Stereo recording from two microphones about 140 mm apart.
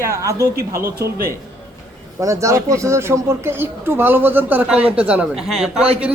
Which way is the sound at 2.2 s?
20° right (ahead or behind).